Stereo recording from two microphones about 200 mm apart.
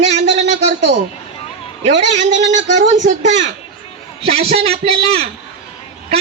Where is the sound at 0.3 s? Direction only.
35° right (ahead or behind).